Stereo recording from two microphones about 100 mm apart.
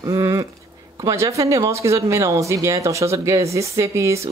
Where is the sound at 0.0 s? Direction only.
30° right (ahead or behind).